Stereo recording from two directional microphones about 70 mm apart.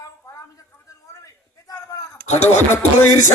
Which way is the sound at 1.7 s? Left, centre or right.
Left.